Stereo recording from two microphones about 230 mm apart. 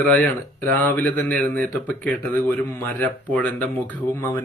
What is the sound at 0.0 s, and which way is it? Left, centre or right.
Speech, centre.